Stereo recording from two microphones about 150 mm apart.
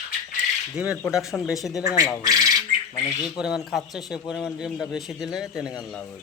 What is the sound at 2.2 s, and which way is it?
Speech, 25° right (ahead or behind).